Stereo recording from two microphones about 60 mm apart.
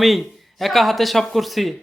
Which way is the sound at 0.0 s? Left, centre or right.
Centre.